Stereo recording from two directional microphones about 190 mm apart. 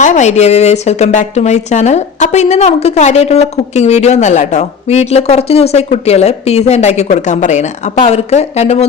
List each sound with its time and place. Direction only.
0.0 s speech: 40° left (ahead or behind)